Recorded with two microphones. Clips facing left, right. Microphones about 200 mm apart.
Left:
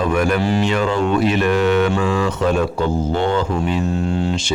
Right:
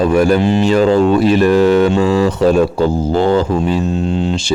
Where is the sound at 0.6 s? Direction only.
35° right (ahead or behind).